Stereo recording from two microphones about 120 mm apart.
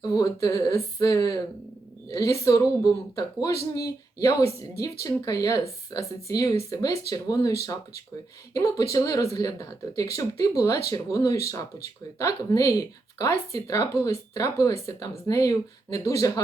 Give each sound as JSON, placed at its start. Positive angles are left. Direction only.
{"t": 0.0, "sound": "speech", "side_deg": 30}